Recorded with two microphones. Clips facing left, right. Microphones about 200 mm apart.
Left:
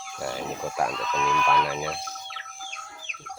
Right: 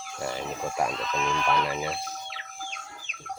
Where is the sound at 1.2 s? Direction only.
30° right (ahead or behind).